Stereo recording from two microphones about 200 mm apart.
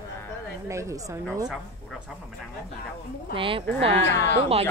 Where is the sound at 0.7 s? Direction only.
15° right (ahead or behind).